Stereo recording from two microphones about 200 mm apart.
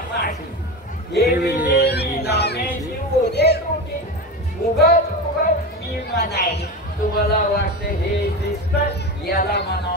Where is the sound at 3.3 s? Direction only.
55° left (ahead or behind).